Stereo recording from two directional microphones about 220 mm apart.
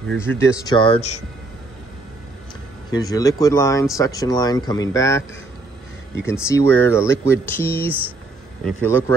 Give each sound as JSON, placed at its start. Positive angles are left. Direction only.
{"t": 0.2, "sound": "speech", "side_deg": 10}
{"t": 2.9, "sound": "speech", "side_deg": 15}
{"t": 6.2, "sound": "speech", "side_deg": 10}